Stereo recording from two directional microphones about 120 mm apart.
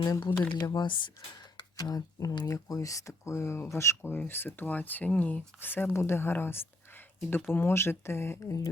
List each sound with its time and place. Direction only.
0.0 s speech: 35° left (ahead or behind)